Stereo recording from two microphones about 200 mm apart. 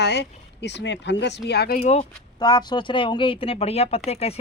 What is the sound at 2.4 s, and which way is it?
Speech, 20° left (ahead or behind).